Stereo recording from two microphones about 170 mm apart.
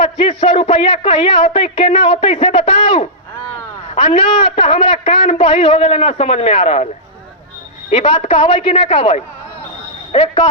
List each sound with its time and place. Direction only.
0.0 s a man's voice: 35° left (ahead or behind)
7.9 s a man's voice: 35° left (ahead or behind)